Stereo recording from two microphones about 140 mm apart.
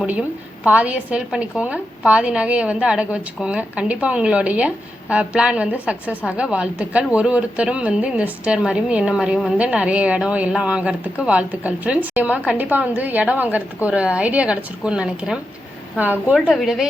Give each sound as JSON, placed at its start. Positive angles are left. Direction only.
{"t": 0.0, "sound": "a woman's voice", "side_deg": -10}